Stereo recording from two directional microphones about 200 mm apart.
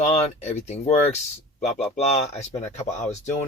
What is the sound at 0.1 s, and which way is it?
Speech, 35° left (ahead or behind).